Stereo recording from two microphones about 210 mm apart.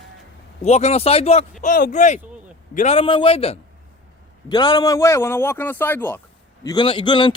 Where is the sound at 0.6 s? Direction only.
30° left (ahead or behind); by 6.1 s 10° left (ahead or behind).